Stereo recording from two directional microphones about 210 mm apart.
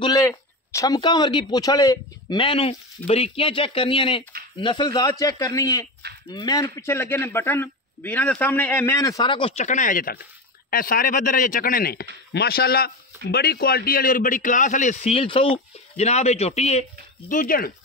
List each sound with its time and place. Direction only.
0.0 s a man's voice: 15° left (ahead or behind); by 17.7 s 40° left (ahead or behind)